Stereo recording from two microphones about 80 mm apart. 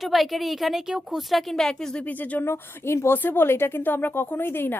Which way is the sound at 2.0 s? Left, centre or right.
Left.